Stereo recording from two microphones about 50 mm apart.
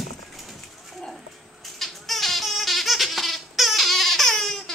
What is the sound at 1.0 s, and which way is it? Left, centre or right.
Goat, centre.